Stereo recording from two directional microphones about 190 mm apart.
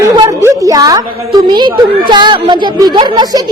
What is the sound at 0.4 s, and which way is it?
A woman's voice, 15° right (ahead or behind).